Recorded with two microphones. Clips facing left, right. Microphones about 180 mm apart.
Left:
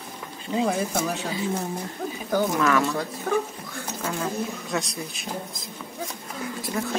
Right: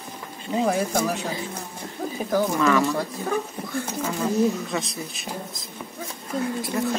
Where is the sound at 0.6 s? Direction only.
Centre (ahead or behind).